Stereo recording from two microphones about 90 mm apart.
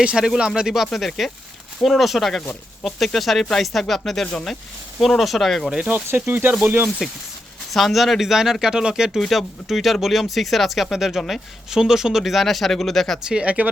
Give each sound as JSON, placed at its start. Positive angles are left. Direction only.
{"t": 0.0, "sound": "speech", "side_deg": -10}
{"t": 5.7, "sound": "speech", "side_deg": -15}
{"t": 7.7, "sound": "speech", "side_deg": 0}
{"t": 13.2, "sound": "speech", "side_deg": -10}